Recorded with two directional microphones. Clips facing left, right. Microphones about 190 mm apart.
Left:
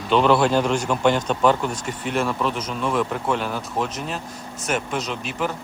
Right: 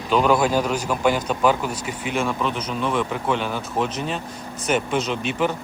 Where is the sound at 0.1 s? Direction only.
5° right (ahead or behind).